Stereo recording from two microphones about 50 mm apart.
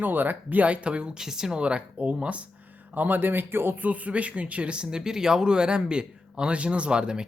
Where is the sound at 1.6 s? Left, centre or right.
Right.